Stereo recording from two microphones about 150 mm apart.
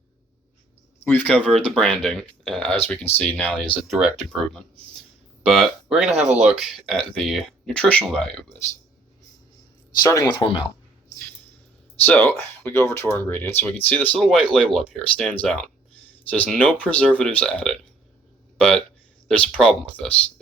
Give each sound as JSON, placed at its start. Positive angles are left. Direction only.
{"t": 0.9, "sound": "speech", "side_deg": 10}
{"t": 10.0, "sound": "speech", "side_deg": 25}
{"t": 12.0, "sound": "speech", "side_deg": 10}
{"t": 19.3, "sound": "speech", "side_deg": 5}